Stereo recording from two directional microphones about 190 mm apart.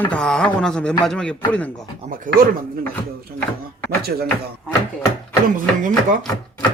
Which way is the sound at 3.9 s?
55° right (ahead or behind).